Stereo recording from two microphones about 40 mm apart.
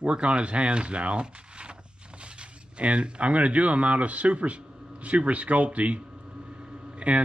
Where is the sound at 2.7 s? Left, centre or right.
Right.